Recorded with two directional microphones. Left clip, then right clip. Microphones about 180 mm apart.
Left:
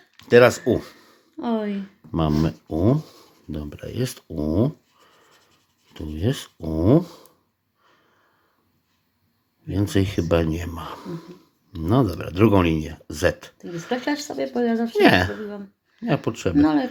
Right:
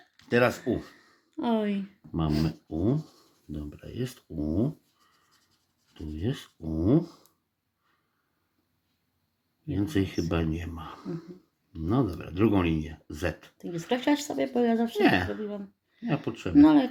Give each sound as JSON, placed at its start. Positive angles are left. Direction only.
{"t": 0.3, "sound": "speech", "side_deg": 35}
{"t": 1.4, "sound": "speech", "side_deg": -25}
{"t": 2.4, "sound": "speech", "side_deg": 35}
{"t": 5.9, "sound": "speech", "side_deg": 40}
{"t": 9.7, "sound": "speech", "side_deg": 35}
{"t": 13.8, "sound": "speech", "side_deg": -15}
{"t": 14.9, "sound": "speech", "side_deg": 35}
{"t": 16.6, "sound": "speech", "side_deg": -20}